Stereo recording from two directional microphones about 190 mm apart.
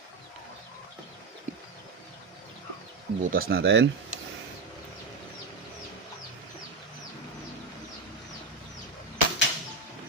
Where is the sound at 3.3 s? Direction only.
50° right (ahead or behind).